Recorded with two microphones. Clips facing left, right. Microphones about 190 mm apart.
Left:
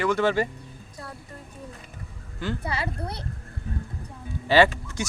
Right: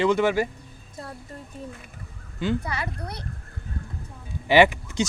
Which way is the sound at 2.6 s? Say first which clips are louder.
Left 2 dB; 30° left (ahead or behind).